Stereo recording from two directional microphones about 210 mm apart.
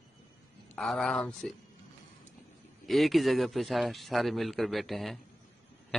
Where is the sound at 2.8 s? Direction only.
Centre (ahead or behind).